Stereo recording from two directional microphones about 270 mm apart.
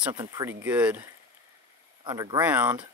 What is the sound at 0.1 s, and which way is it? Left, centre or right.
Speech, centre.